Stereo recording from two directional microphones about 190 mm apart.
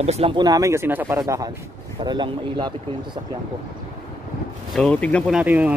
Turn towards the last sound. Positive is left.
turn(degrees=-10)  # may be behind; listen again after turning